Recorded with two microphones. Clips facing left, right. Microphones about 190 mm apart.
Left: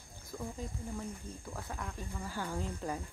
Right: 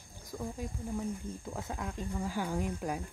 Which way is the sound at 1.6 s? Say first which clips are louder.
Right 3 dB; 20° right (ahead or behind).